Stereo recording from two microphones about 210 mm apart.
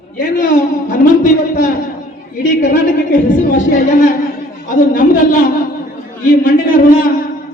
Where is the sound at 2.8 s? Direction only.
40° left (ahead or behind).